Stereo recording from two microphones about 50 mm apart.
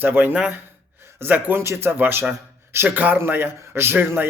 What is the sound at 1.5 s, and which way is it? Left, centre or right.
Speech, right.